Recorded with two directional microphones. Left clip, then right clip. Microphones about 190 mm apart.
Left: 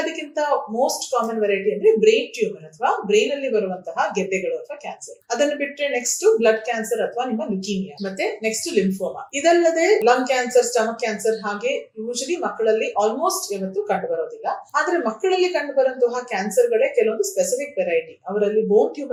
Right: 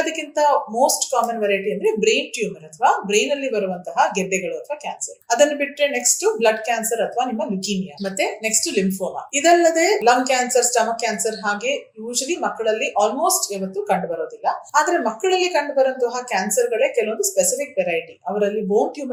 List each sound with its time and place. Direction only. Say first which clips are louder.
0.0 s speech: right 5 dB; 45° right (ahead or behind)